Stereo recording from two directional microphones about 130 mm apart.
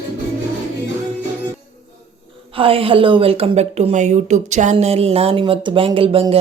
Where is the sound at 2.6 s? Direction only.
45° right (ahead or behind).